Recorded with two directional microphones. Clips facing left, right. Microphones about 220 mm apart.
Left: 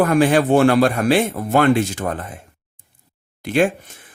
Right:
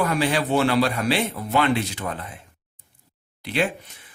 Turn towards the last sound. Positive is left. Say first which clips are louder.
# left 7 dB
turn(degrees=50)  # may be behind; listen again after turning